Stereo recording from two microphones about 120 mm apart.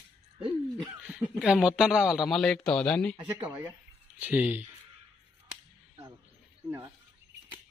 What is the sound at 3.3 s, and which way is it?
Speech, 20° right (ahead or behind).